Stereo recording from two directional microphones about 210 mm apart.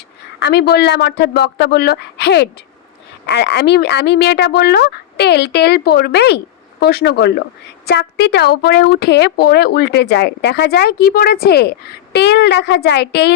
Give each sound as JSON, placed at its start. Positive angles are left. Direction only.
{"t": 0.3, "sound": "a woman's voice", "side_deg": 55}